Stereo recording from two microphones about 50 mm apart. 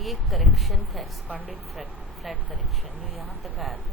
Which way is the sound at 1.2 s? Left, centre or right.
Right.